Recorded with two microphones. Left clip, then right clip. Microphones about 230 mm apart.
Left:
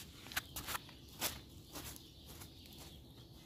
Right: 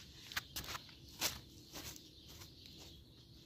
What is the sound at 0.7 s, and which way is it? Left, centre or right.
Walk, left.